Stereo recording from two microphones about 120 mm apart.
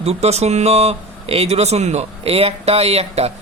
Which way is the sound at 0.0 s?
60° right (ahead or behind).